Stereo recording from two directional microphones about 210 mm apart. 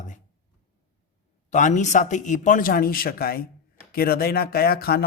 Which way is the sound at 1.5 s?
35° left (ahead or behind).